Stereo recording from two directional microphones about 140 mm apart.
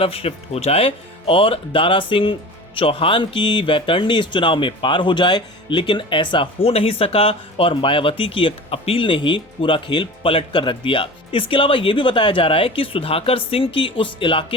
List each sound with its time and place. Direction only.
0.0 s speech: 45° left (ahead or behind)